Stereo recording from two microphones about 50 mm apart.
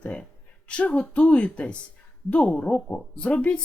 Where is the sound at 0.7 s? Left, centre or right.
Left.